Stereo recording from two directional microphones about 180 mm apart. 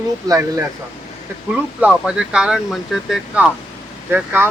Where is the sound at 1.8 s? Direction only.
5° right (ahead or behind).